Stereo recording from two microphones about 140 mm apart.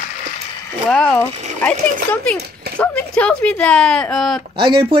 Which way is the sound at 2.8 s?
10° left (ahead or behind).